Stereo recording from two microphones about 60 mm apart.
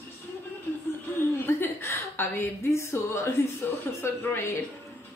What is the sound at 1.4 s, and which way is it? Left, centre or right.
Chuckle, left.